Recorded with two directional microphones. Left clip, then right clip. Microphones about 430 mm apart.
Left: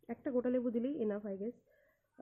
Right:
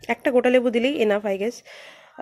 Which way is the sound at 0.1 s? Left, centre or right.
Centre.